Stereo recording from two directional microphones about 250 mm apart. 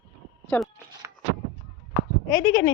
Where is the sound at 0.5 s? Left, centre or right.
Centre.